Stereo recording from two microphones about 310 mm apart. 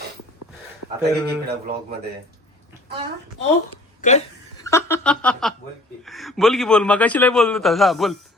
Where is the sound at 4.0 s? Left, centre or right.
Left.